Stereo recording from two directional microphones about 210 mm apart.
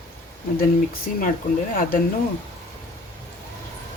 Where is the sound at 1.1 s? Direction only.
40° left (ahead or behind).